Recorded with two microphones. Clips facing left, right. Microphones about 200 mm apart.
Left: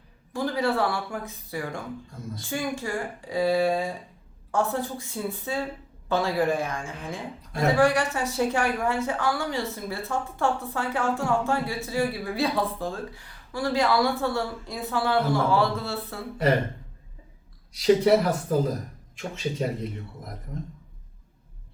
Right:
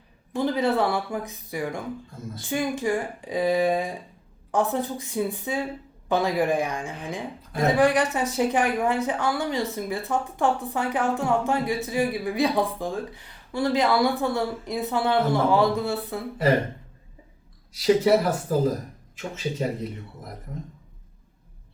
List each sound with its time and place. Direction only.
0.3 s a woman's voice: 20° right (ahead or behind)
17.7 s speech: centre (ahead or behind)